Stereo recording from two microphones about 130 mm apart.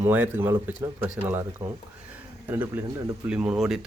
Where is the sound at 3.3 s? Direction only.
5° right (ahead or behind).